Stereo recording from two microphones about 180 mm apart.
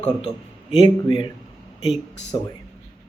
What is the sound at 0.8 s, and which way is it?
Speech, 40° right (ahead or behind).